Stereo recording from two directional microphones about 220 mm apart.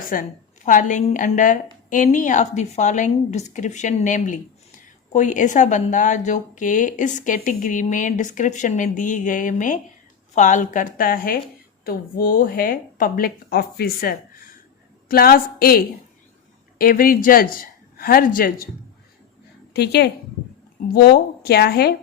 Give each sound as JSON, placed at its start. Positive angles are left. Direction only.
{"t": 0.0, "sound": "a woman's voice", "side_deg": 40}
{"t": 19.7, "sound": "a woman's voice", "side_deg": 45}